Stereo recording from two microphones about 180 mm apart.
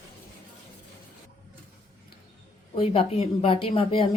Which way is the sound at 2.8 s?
35° left (ahead or behind).